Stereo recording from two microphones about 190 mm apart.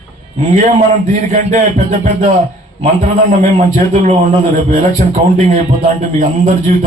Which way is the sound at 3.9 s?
35° right (ahead or behind).